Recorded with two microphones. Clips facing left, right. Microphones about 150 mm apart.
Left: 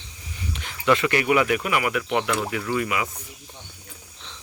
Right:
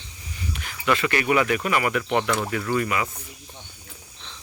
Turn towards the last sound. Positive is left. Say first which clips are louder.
# right 1 dB
turn(degrees=10)  # may be behind; listen again after turning